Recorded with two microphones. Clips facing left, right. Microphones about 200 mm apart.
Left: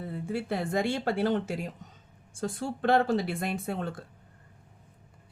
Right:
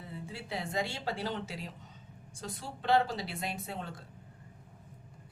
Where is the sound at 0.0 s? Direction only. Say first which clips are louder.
Left 11 dB; 55° left (ahead or behind).